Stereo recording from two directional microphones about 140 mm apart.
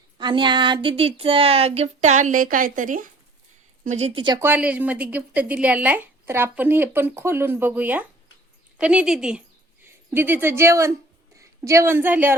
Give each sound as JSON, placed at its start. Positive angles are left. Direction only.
{"t": 0.2, "sound": "speech", "side_deg": -35}
{"t": 3.8, "sound": "speech", "side_deg": -50}
{"t": 4.4, "sound": "a woman's voice", "side_deg": -15}
{"t": 9.8, "sound": "a woman's voice", "side_deg": -15}